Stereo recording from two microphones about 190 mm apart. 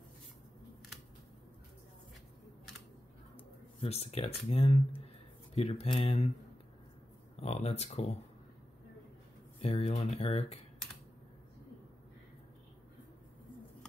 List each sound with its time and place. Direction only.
3.8 s speech: 35° left (ahead or behind)
7.3 s speech: 35° left (ahead or behind)
9.6 s speech: 30° left (ahead or behind)